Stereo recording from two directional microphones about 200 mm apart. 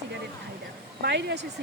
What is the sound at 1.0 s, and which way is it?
Speech, 55° right (ahead or behind).